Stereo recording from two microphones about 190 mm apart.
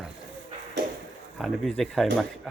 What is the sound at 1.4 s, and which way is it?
Speech, centre (ahead or behind).